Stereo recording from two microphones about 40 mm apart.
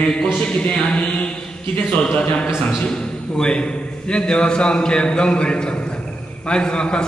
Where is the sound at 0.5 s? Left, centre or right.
Left.